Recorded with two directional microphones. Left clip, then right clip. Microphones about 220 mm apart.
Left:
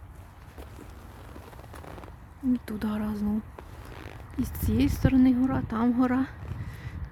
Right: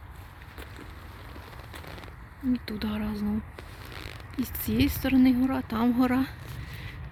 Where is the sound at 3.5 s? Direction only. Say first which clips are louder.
Right 2 dB; 30° left (ahead or behind).